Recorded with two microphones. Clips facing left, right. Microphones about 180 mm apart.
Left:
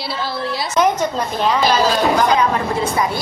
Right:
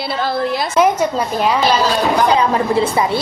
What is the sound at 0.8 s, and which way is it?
Speech, 10° right (ahead or behind).